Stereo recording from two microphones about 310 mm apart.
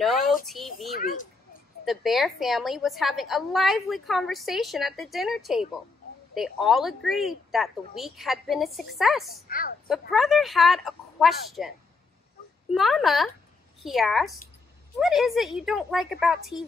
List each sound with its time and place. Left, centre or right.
0.0 s a sound: centre
0.5 s a woman's voice: centre
0.9 s speech: left
1.9 s a woman's voice: centre
9.5 s speech: left
9.8 s a woman's voice: centre
12.7 s a woman's voice: centre